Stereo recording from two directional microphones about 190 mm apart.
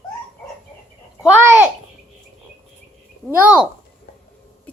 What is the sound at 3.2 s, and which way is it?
Speech, 10° right (ahead or behind).